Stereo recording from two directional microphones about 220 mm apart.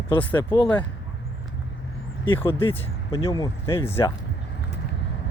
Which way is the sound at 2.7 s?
15° left (ahead or behind).